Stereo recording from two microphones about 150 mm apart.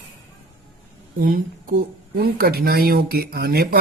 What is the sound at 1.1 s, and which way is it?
Speech, 85° right.